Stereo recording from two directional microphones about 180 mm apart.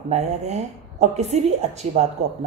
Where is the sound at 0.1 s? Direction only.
40° right (ahead or behind).